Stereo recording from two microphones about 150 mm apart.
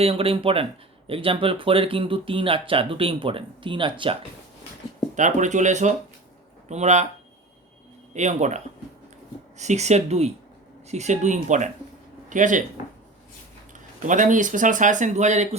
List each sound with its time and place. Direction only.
0.0 s speech: 40° right (ahead or behind)
5.1 s speech: 55° right (ahead or behind)
8.1 s speech: 50° right (ahead or behind)
14.1 s speech: 60° right (ahead or behind)